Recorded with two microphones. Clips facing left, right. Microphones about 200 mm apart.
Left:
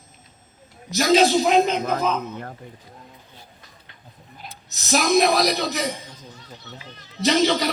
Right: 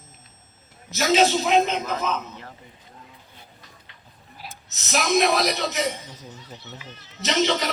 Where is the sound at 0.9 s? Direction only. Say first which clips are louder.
Left 3 dB; 35° left (ahead or behind).